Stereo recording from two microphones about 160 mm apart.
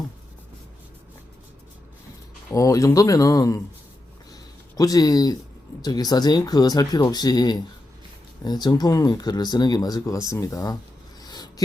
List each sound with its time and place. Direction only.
2.5 s speech: 20° left (ahead or behind)
4.8 s speech: 25° left (ahead or behind)
11.2 s a sound: 25° left (ahead or behind)